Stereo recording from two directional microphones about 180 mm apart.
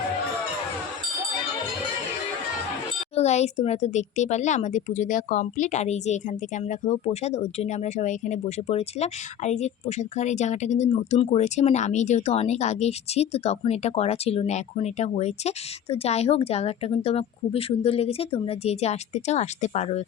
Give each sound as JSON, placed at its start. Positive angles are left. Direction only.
{"t": 3.2, "sound": "speech", "side_deg": 40}